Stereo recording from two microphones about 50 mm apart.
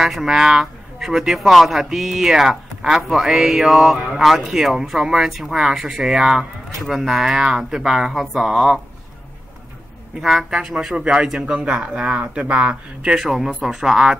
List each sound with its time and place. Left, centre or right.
0.0 s speech: centre
10.5 s speech: centre
13.2 s speech: centre